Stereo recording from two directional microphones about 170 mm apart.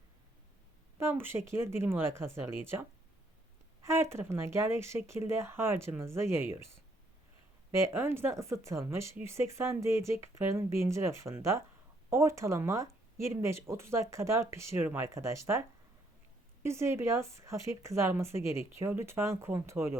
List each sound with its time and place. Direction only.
0.9 s speech: 15° right (ahead or behind)
3.8 s speech: 15° right (ahead or behind)
7.7 s speech: 15° right (ahead or behind)
16.6 s speech: 15° right (ahead or behind)